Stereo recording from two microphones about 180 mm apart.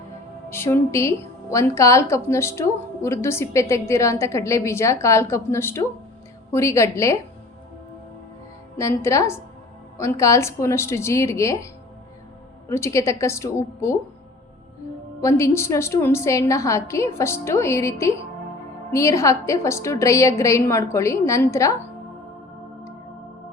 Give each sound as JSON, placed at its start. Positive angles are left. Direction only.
{"t": 0.5, "sound": "a woman's voice", "side_deg": 15}
{"t": 8.8, "sound": "a woman's voice", "side_deg": 15}
{"t": 15.2, "sound": "a woman's voice", "side_deg": 15}